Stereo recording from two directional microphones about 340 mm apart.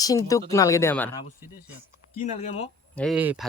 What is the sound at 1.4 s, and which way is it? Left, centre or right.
Speech, centre.